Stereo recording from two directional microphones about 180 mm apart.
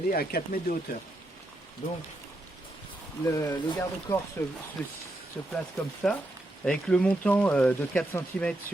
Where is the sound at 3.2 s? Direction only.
15° left (ahead or behind).